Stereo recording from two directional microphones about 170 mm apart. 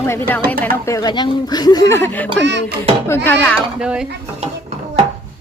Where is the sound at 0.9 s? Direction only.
20° left (ahead or behind).